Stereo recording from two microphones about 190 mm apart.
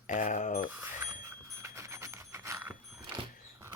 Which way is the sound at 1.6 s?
15° right (ahead or behind).